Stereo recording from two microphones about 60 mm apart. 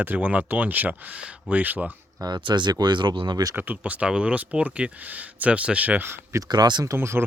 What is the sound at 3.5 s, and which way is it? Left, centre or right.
Speech, right.